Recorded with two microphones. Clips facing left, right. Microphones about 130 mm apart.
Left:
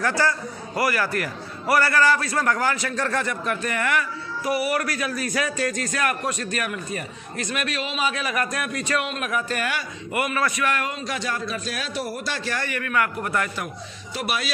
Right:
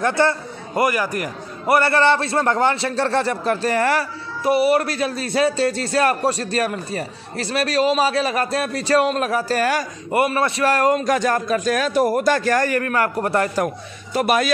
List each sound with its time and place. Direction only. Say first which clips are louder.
0.0 s a man's voice: right 5 dB; 25° right (ahead or behind)
14.1 s a man's voice: right 10 dB; 45° right (ahead or behind)